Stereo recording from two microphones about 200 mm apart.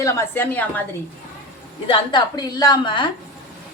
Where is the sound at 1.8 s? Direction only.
25° left (ahead or behind).